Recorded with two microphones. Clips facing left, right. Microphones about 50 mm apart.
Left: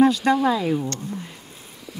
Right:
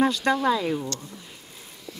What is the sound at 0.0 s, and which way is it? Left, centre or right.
Speech, centre.